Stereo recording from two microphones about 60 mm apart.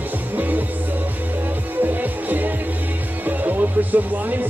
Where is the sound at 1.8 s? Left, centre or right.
Right.